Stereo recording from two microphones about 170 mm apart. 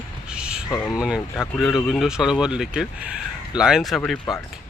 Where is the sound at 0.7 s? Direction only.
20° left (ahead or behind).